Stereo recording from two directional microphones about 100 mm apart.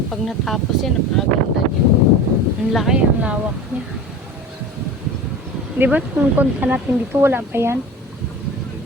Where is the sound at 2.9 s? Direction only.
10° right (ahead or behind).